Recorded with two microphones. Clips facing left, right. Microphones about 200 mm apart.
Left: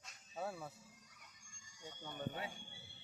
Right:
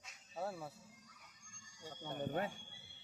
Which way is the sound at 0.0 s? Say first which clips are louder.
Right 1 dB; 5° right (ahead or behind).